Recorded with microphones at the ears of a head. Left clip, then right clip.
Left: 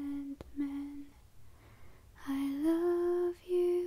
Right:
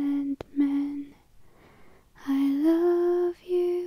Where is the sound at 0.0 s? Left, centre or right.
Right.